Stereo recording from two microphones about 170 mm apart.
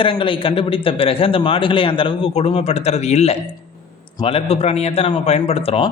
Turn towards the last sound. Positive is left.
turn(degrees=35)  # may be behind; listen again after turning